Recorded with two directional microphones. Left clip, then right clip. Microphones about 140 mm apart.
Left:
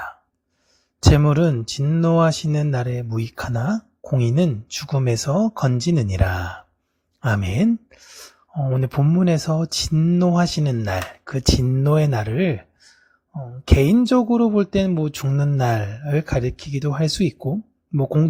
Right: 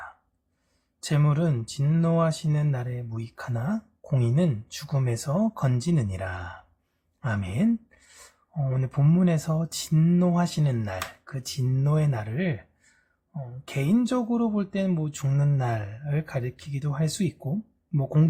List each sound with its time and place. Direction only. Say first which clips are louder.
1.1 s speech: left 8 dB; 50° left (ahead or behind)
1.8 s speech: left 7 dB; 35° left (ahead or behind); by 7.7 s 50° left (ahead or behind)
7.9 s a sound: left 10 dB; 45° left (ahead or behind)
9.0 s speech: left 3 dB; 30° left (ahead or behind)
9.2 s speech: left 7 dB; 40° left (ahead or behind)
9.9 s speech: left 4 dB; 25° left (ahead or behind)
10.3 s speech: left 6 dB; 45° left (ahead or behind)
13.7 s speech: left 13 dB; 55° left (ahead or behind)
13.9 s speech: left 8 dB; 40° left (ahead or behind)
15.3 s speech: left 5 dB; 30° left (ahead or behind)
15.5 s speech: left 8 dB; 55° left (ahead or behind)